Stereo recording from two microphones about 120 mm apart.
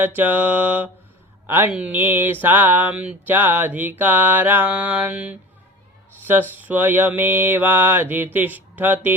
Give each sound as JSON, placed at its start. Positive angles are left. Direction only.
{"t": 0.0, "sound": "mantra", "side_deg": -15}
{"t": 6.6, "sound": "mantra", "side_deg": -15}